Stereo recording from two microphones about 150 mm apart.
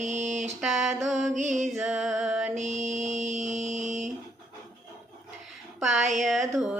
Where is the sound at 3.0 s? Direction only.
55° right (ahead or behind).